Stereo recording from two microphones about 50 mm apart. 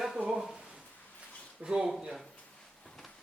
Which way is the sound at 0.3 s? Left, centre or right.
Centre.